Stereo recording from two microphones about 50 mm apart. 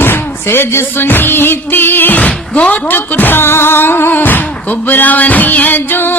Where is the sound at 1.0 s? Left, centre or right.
Left.